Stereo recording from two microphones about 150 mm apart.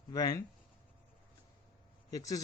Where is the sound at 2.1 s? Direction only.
25° left (ahead or behind).